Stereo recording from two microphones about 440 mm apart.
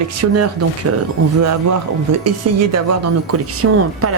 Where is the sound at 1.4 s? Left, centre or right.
Right.